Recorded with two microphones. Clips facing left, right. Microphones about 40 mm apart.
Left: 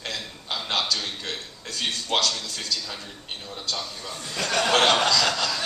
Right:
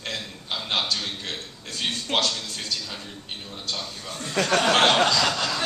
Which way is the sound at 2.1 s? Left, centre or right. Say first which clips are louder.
Even; right.